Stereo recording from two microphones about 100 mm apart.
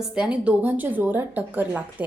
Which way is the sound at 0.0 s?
10° right (ahead or behind).